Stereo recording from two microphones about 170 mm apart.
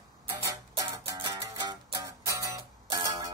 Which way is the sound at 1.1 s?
25° right (ahead or behind).